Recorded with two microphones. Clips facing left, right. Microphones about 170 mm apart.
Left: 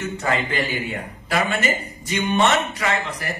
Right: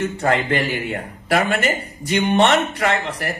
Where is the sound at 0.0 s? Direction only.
55° right (ahead or behind).